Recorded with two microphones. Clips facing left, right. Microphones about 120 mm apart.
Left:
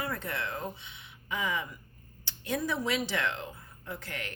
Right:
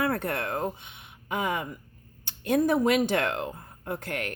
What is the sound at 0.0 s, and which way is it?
Speech, 60° right (ahead or behind).